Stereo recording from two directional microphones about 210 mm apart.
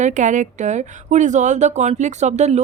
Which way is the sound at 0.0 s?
35° right (ahead or behind).